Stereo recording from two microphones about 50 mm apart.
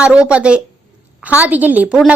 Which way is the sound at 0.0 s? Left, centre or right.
Centre.